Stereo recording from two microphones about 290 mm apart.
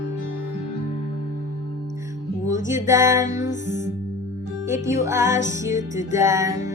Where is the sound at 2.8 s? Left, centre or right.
Centre.